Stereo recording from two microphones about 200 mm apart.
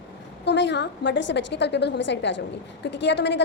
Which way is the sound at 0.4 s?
60° left (ahead or behind).